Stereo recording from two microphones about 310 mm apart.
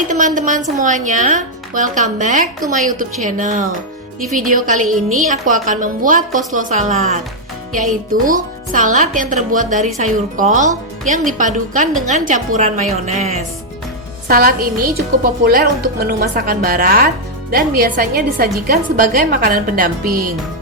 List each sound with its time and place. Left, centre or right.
0.1 s a woman's voice: right